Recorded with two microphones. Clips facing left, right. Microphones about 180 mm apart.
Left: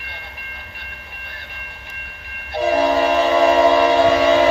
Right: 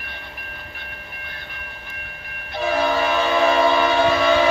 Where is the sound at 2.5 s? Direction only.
40° left (ahead or behind).